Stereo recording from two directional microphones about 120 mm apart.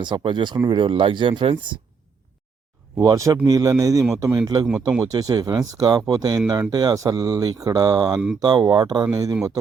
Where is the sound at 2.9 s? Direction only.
25° right (ahead or behind).